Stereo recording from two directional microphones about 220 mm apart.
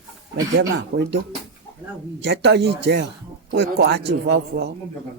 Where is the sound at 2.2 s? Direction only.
50° right (ahead or behind).